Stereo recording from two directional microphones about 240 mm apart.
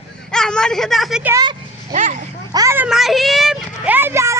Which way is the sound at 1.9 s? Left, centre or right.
Right.